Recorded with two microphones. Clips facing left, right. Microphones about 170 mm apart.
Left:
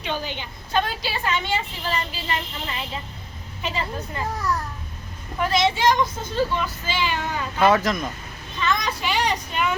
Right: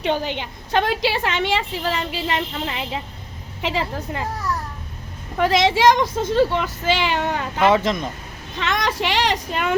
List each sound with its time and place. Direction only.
0.0 s a woman's voice: 70° right (ahead or behind)
3.6 s speech: 85° right
5.4 s speech: 90° right; by 7.6 s 70° right (ahead or behind)
7.6 s speech: 25° right (ahead or behind)
8.5 s speech: 75° right (ahead or behind)